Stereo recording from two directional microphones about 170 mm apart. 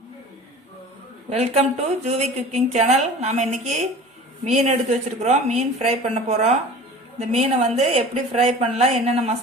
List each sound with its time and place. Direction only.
1.3 s a woman's voice: 40° right (ahead or behind)